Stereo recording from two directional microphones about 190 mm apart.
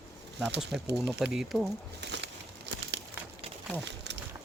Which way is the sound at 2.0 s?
65° right (ahead or behind).